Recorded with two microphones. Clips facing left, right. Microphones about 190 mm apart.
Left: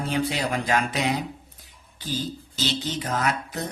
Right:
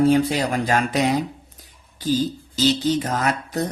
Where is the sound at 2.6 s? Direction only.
40° right (ahead or behind).